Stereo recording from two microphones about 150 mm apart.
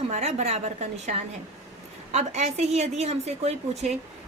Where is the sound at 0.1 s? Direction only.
50° right (ahead or behind).